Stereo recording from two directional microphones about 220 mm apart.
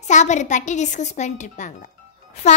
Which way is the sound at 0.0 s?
30° left (ahead or behind).